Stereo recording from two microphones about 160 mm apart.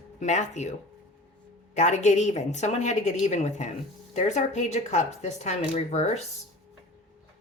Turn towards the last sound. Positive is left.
turn(degrees=45)  # may be behind; listen again after turning